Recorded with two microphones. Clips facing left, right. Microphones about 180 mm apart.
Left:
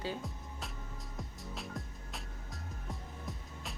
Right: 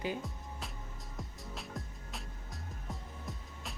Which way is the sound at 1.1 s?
Centre (ahead or behind).